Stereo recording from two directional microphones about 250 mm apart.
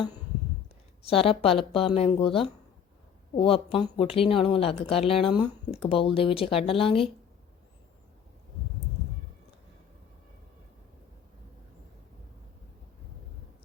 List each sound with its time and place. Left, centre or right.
1.0 s speech: left